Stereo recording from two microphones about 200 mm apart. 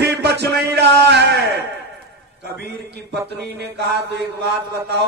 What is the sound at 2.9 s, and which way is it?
Mantra, 55° right (ahead or behind).